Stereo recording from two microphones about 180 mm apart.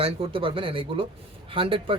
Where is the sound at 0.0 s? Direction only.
30° right (ahead or behind).